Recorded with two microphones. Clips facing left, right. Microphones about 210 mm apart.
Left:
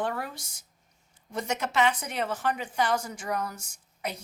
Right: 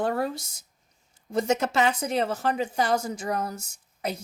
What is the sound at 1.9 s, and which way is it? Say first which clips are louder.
A woman's voice: right 6 dB; 30° right (ahead or behind).